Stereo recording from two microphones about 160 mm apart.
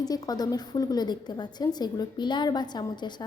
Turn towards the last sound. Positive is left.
turn(degrees=25)  # may be behind; listen again after turning